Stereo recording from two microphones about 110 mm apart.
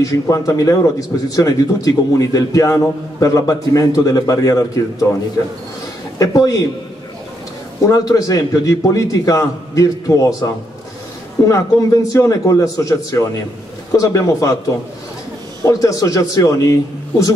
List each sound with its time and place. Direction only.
0.0 s speech: 30° left (ahead or behind)
6.1 s a man's voice: 30° left (ahead or behind)
7.8 s speech: 30° left (ahead or behind)
15.6 s speech: 35° left (ahead or behind)